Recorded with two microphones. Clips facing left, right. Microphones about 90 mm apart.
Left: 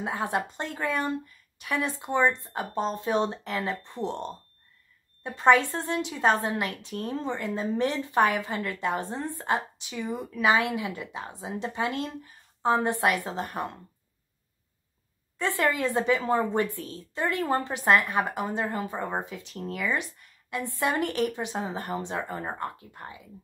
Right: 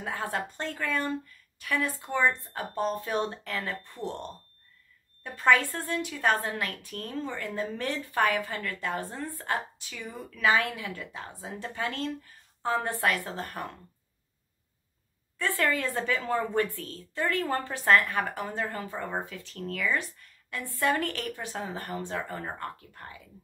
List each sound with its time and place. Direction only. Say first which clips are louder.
0.0 s a woman's voice: left 4 dB; 20° left (ahead or behind)
15.3 s a woman's voice: left 2 dB; 20° left (ahead or behind)